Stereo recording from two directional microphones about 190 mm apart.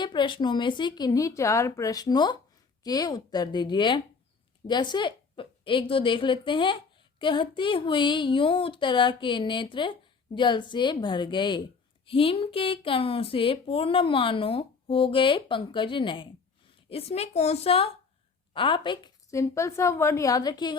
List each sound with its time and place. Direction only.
0.0 s a woman's voice: 25° left (ahead or behind)